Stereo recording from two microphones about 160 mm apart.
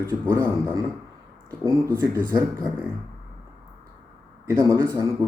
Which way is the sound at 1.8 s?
15° right (ahead or behind).